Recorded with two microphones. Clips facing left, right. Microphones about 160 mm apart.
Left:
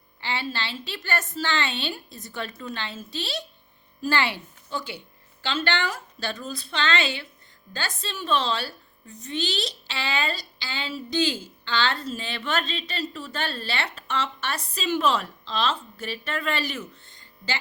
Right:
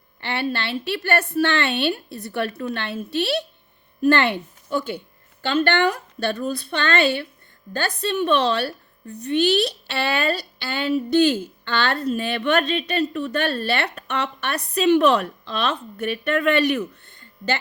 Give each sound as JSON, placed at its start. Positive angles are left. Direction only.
{"t": 0.2, "sound": "a woman's voice", "side_deg": -60}